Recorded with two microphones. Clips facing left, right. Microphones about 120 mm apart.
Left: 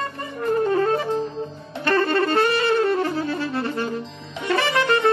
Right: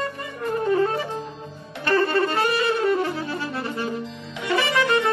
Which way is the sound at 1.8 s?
25° left (ahead or behind).